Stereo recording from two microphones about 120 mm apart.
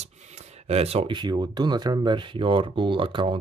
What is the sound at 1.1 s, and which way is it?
Speech, 40° right (ahead or behind).